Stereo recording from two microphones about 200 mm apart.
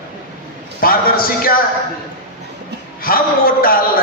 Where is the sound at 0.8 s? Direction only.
45° left (ahead or behind).